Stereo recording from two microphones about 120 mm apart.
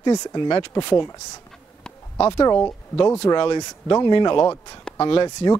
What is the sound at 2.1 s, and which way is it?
Speech, 20° left (ahead or behind).